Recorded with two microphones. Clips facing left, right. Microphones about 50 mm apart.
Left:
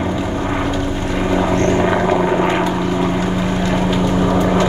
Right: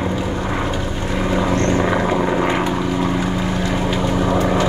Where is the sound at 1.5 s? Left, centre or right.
Centre.